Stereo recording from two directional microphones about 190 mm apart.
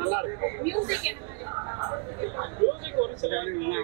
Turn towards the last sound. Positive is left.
turn(degrees=-20)  # may be behind; listen again after turning